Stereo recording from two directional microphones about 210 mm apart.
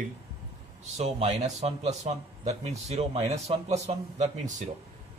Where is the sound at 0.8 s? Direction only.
30° right (ahead or behind).